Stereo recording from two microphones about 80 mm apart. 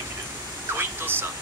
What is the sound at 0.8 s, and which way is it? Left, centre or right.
Speech, right.